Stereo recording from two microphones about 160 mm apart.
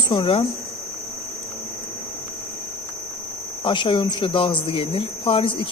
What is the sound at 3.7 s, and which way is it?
Speech, 30° left (ahead or behind).